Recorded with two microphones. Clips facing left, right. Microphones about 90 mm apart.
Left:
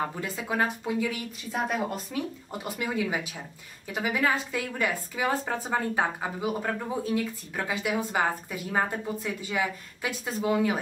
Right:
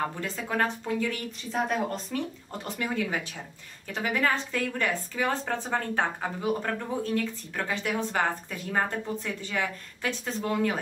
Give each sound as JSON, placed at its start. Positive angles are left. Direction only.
{"t": 0.1, "sound": "a woman's voice", "side_deg": 10}